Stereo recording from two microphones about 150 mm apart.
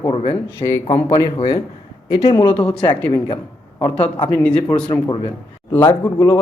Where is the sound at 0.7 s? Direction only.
20° left (ahead or behind).